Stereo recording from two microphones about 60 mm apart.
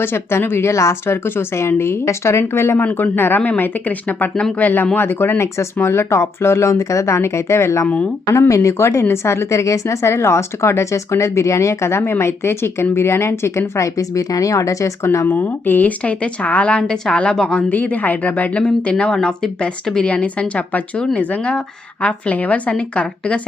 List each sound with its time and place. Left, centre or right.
0.0 s a woman's voice: left
1.0 s a woman's voice: left
13.8 s speech: left
15.3 s speech: left
21.0 s speech: centre